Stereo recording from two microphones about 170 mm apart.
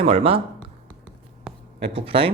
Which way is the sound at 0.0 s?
35° right (ahead or behind).